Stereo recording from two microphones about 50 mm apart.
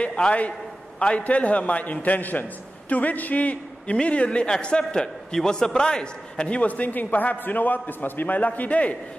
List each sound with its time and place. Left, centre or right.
0.0 s a man's voice: left